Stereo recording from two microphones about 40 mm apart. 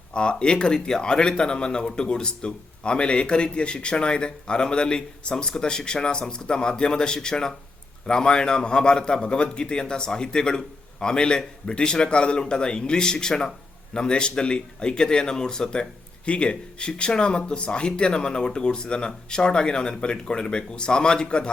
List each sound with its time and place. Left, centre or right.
0.1 s speech: left